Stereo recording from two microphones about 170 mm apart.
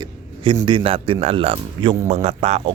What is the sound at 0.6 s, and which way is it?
Speech, 30° right (ahead or behind).